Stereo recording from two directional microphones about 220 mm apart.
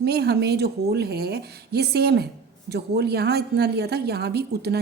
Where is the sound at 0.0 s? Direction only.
45° right (ahead or behind).